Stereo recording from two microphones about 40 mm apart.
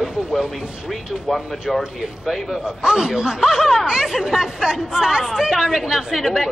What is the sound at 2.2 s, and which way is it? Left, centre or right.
Speech, centre.